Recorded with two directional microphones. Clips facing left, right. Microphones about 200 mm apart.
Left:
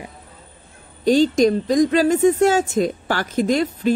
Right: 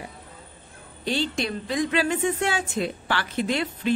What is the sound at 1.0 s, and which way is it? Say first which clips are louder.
A woman's voice: left 12 dB; 40° left (ahead or behind).